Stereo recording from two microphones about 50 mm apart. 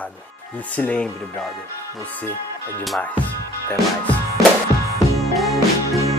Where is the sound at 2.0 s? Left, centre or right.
Left.